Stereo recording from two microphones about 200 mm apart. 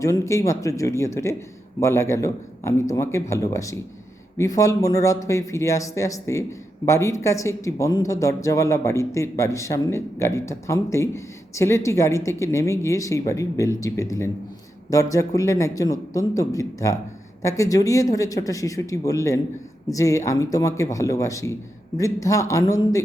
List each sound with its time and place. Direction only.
0.0 s speech: 15° left (ahead or behind)